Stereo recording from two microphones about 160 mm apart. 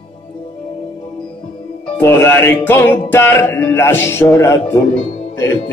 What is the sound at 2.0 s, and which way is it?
Music, 15° left (ahead or behind).